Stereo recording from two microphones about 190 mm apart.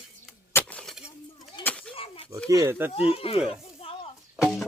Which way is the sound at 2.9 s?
30° left (ahead or behind).